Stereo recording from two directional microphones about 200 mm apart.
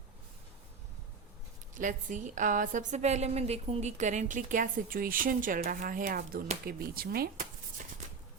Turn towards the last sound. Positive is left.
turn(degrees=-40)  # may be behind; listen again after turning